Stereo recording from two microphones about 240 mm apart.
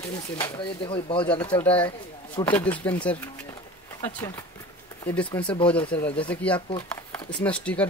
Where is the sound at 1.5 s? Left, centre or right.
Centre.